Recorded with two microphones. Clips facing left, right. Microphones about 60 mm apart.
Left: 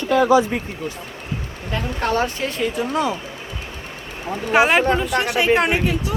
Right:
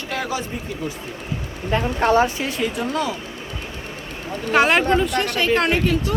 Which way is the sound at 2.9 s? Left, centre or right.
Left.